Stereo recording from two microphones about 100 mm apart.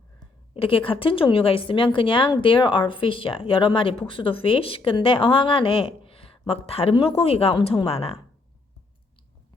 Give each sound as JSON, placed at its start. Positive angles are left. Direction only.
{"t": 0.5, "sound": "speech", "side_deg": 65}